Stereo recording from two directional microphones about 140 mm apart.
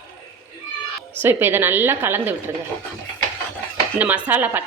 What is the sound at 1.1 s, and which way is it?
A woman's voice, 15° right (ahead or behind).